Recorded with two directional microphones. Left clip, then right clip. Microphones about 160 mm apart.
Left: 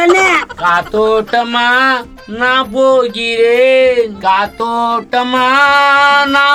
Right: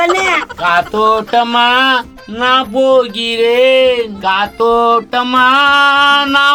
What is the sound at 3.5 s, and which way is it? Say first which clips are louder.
Speech: even; 10° right (ahead or behind).